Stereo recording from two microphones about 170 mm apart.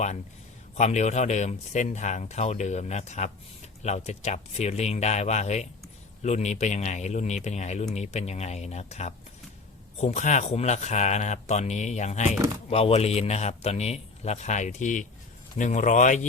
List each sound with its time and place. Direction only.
0.8 s a man's voice: 45° left (ahead or behind)